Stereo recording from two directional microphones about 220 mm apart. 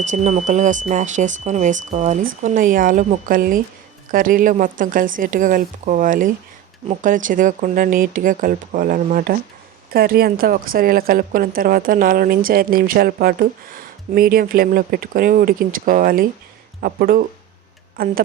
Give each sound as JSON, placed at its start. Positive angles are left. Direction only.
{"t": 0.0, "sound": "a woman's voice", "side_deg": -35}